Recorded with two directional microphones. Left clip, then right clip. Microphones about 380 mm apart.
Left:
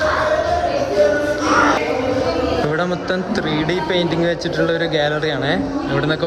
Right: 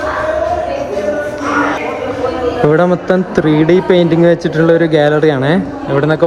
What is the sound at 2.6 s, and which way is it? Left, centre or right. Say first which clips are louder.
Speech: right 9 dB; right.